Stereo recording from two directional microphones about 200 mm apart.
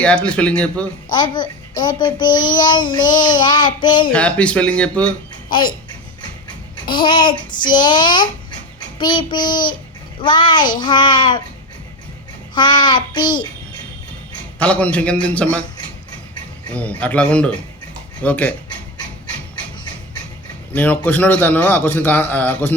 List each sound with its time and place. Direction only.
0.0 s speech: 5° left (ahead or behind)
1.1 s a child's voice: 20° left (ahead or behind)
4.1 s speech: 5° left (ahead or behind)
5.5 s speech: 25° left (ahead or behind)
6.8 s a child's voice: 25° left (ahead or behind)
12.5 s a child's voice: 20° left (ahead or behind)
14.6 s a man's voice: 5° left (ahead or behind)
16.7 s a man's voice: 5° left (ahead or behind)
20.7 s a man's voice: 10° left (ahead or behind)